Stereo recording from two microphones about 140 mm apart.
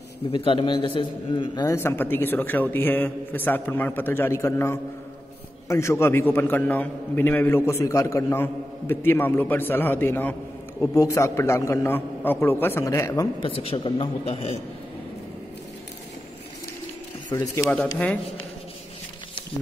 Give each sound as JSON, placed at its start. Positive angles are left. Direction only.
{"t": 0.3, "sound": "a man's voice", "side_deg": 35}
{"t": 1.8, "sound": "a man's voice", "side_deg": 15}
{"t": 13.4, "sound": "a man's voice", "side_deg": 40}
{"t": 17.3, "sound": "a man's voice", "side_deg": 25}
{"t": 17.6, "sound": "a man's voice", "side_deg": 10}